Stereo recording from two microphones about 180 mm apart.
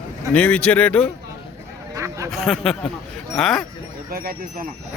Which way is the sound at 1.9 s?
15° right (ahead or behind).